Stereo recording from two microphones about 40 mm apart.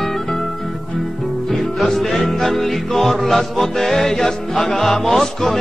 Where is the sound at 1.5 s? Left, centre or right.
Centre.